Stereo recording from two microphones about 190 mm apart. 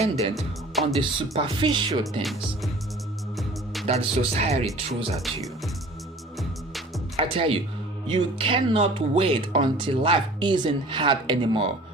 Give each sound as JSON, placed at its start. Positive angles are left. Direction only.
{"t": 0.3, "sound": "speech", "side_deg": 0}
{"t": 0.9, "sound": "speech", "side_deg": -25}
{"t": 3.3, "sound": "music", "side_deg": 0}
{"t": 3.8, "sound": "speech", "side_deg": -30}
{"t": 7.2, "sound": "speech", "side_deg": -30}